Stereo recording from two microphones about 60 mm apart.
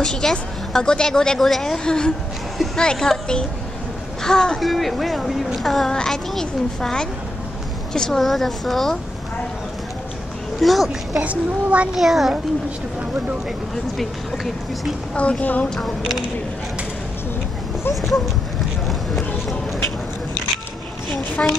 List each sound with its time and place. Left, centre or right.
0.0 s a woman's voice: centre
10.6 s speech: centre
11.2 s a child's voice: right
11.9 s speech: centre
13.9 s speech: centre
15.1 s a woman's voice: left
15.7 s speech: centre
21.4 s a woman's voice: centre